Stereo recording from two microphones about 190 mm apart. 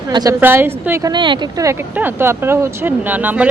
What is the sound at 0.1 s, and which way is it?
A woman's voice, 20° right (ahead or behind).